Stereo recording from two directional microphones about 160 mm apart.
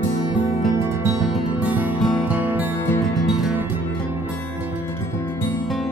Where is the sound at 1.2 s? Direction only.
5° right (ahead or behind).